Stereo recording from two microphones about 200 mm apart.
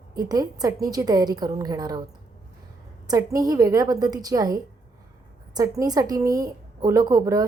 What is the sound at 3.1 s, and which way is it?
A woman's voice, 15° right (ahead or behind).